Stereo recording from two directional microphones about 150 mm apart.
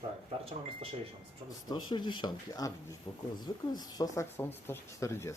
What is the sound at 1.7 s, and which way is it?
Speech, 30° left (ahead or behind).